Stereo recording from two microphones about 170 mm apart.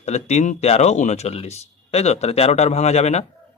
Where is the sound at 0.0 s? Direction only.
40° left (ahead or behind).